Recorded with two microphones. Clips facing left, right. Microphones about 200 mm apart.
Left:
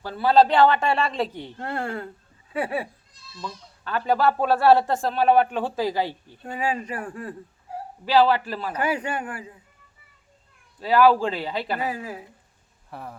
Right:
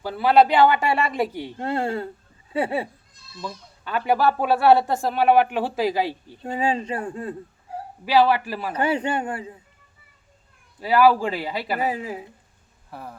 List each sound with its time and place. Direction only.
0.0 s speech: 15° right (ahead or behind)
1.6 s speech: 25° right (ahead or behind)
3.4 s speech: 15° right (ahead or behind)
6.4 s speech: 25° right (ahead or behind)
8.0 s speech: 10° right (ahead or behind)
8.7 s speech: 30° right (ahead or behind)
10.8 s speech: 10° right (ahead or behind)
11.8 s speech: 20° right (ahead or behind)
12.9 s speech: centre (ahead or behind)